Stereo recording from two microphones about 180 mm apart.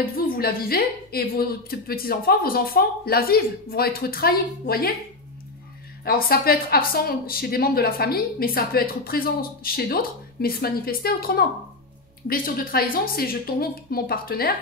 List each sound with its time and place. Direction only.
0.4 s speech: 55° left (ahead or behind)
6.0 s speech: 55° left (ahead or behind)